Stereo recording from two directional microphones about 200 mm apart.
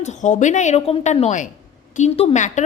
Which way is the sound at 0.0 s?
35° left (ahead or behind).